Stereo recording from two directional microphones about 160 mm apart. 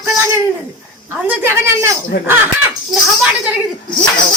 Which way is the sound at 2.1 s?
90° left.